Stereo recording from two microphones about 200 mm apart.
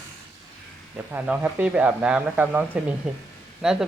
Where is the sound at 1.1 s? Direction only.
10° right (ahead or behind).